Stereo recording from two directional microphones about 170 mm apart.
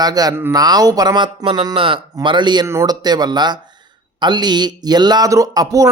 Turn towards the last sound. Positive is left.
turn(degrees=-20)  # may be behind; listen again after turning